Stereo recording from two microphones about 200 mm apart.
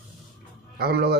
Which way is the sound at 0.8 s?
55° right (ahead or behind).